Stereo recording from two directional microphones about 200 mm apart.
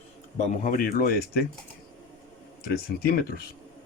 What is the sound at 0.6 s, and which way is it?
Speech, 45° left (ahead or behind).